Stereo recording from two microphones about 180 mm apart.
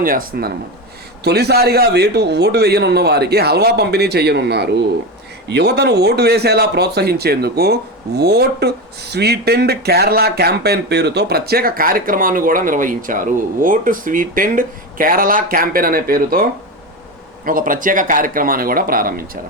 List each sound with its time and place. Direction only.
0.0 s speech: 50° right (ahead or behind)
1.2 s speech: 65° right (ahead or behind)